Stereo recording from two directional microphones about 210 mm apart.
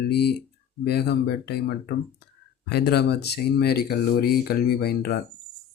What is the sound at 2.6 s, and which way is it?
Speech, 50° left (ahead or behind).